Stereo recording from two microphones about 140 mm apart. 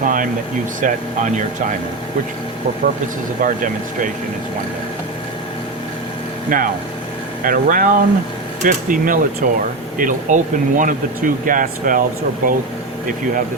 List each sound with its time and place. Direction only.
0.0 s speech: 75° right (ahead or behind)
3.4 s speech: 70° right (ahead or behind)
6.5 s speech: 80° right
12.4 s speech: 90° right